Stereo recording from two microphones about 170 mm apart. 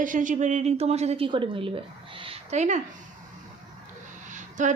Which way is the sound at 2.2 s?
40° right (ahead or behind).